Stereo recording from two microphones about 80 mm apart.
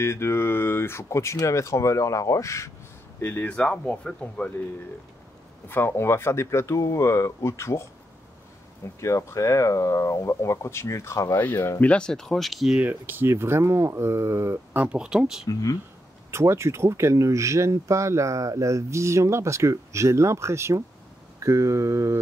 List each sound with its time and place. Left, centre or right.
0.0 s speech: left
3.2 s speech: left
5.7 s speech: left
11.3 s speech: left
11.8 s speech: centre
12.8 s speech: right
14.8 s speech: centre
16.3 s speech: right